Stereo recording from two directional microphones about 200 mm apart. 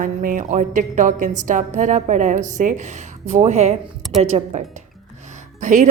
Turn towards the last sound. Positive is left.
turn(degrees=-40)  # may be behind; listen again after turning